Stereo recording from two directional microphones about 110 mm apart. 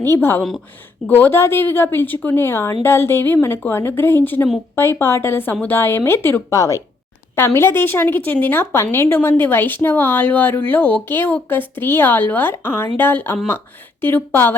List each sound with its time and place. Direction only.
0.0 s a woman's voice: 20° left (ahead or behind)